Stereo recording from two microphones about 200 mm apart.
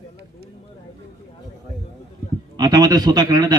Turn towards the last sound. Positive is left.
turn(degrees=-20)  # may be behind; listen again after turning